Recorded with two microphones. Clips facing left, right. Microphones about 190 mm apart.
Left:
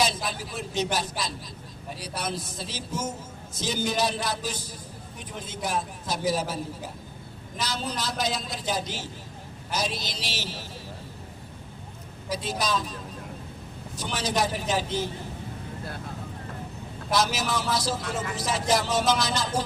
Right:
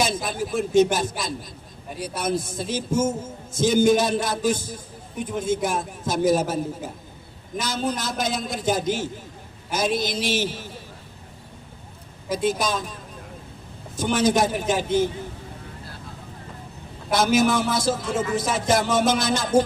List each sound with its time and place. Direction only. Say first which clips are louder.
0.0 s a man's voice: right 3 dB; 50° right (ahead or behind)
12.3 s a man's voice: right 5 dB; 50° right (ahead or behind)
17.1 s a man's voice: right 7 dB; 55° right (ahead or behind)